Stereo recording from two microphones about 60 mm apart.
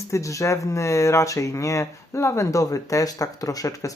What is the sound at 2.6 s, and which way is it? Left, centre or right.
Speech, left.